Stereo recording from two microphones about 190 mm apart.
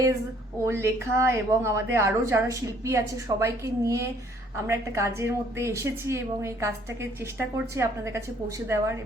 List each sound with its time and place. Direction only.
0.6 s a woman's voice: 15° right (ahead or behind)